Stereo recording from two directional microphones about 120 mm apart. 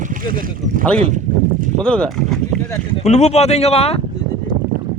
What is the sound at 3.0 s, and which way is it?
Speech, 65° left (ahead or behind).